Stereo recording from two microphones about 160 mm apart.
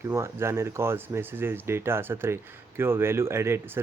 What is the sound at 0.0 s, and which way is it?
Speech, 15° right (ahead or behind).